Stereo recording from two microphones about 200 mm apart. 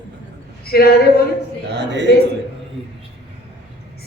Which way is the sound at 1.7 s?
60° right (ahead or behind).